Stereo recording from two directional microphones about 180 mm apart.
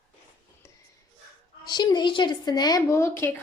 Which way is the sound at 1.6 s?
25° left (ahead or behind).